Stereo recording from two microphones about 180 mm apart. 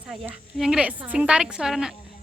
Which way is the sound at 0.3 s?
5° right (ahead or behind).